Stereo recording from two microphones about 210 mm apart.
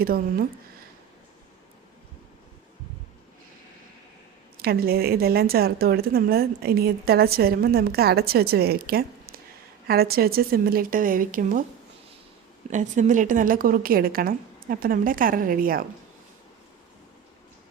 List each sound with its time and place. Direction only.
0.0 s speech: 45° right (ahead or behind)
4.5 s speech: 45° right (ahead or behind)
12.7 s a woman's voice: 35° right (ahead or behind)